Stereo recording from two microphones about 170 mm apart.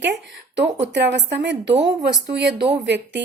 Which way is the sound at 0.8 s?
90° right.